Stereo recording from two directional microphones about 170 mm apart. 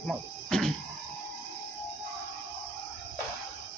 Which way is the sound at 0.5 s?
5° left (ahead or behind).